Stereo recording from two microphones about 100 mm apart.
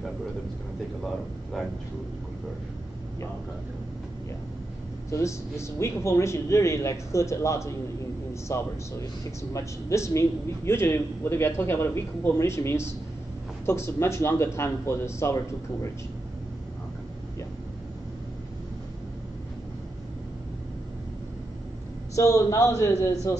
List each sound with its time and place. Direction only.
1.0 s speech: centre (ahead or behind)
5.1 s speech: 30° left (ahead or behind)
22.1 s speech: 35° left (ahead or behind)